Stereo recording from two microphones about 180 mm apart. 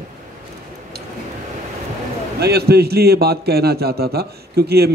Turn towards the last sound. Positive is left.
turn(degrees=-60)  # may be behind; listen again after turning